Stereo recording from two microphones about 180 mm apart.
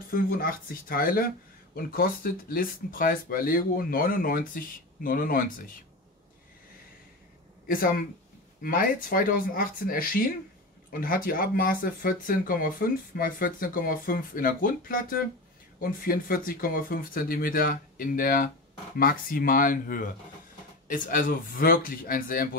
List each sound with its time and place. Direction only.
0.1 s speech: 50° left (ahead or behind)
7.6 s speech: 50° left (ahead or behind)